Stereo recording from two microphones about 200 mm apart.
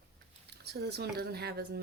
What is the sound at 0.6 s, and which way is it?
Speech, 55° right (ahead or behind).